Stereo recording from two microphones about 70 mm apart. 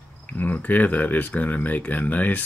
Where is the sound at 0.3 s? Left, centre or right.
Left.